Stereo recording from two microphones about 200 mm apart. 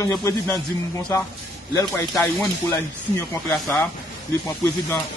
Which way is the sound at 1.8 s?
15° left (ahead or behind).